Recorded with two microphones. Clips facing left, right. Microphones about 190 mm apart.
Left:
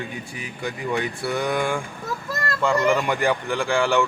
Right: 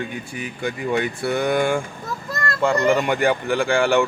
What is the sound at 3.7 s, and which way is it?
Speech, 55° right (ahead or behind).